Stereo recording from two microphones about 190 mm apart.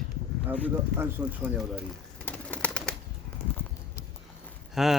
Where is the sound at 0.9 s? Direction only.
15° right (ahead or behind).